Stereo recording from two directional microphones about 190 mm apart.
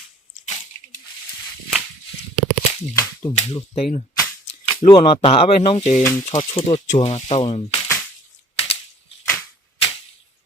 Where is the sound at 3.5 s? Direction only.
35° left (ahead or behind).